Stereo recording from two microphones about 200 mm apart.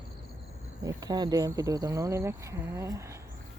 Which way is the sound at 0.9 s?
20° right (ahead or behind).